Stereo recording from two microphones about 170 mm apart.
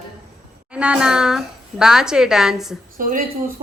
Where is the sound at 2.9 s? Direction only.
55° right (ahead or behind).